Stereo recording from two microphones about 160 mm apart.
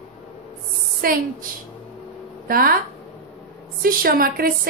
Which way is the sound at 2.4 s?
65° right (ahead or behind).